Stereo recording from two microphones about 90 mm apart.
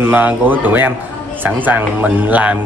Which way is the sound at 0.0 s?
20° right (ahead or behind).